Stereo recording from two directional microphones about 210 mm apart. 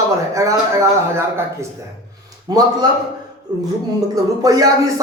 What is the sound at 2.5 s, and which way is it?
Speech, 20° right (ahead or behind).